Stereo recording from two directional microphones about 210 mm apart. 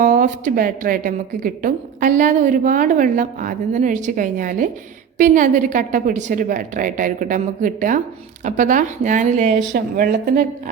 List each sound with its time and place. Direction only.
0.0 s speech: 40° right (ahead or behind)